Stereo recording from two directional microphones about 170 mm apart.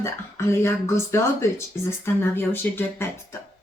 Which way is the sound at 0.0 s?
15° left (ahead or behind).